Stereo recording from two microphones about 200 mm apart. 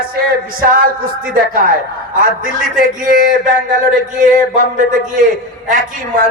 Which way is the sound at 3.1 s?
40° right (ahead or behind).